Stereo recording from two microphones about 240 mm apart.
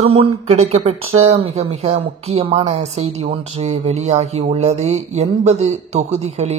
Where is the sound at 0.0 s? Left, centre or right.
Right.